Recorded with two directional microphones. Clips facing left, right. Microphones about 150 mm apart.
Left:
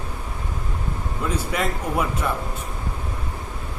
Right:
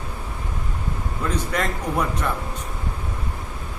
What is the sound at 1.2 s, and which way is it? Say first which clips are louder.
A man's voice: even; 5° left (ahead or behind).